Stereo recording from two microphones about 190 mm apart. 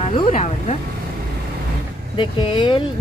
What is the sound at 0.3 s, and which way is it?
Speech, 35° left (ahead or behind).